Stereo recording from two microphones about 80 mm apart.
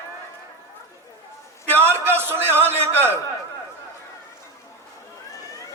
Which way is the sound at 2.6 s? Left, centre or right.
Right.